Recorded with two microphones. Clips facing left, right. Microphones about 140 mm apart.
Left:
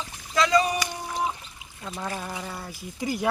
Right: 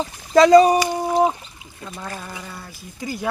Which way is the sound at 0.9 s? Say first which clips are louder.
Right 11 dB; 55° right (ahead or behind).